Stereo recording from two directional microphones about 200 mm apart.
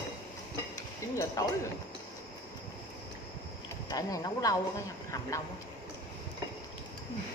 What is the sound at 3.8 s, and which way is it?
Speech, 20° left (ahead or behind).